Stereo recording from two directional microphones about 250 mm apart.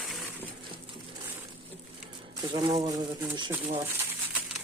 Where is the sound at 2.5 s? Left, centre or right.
Centre.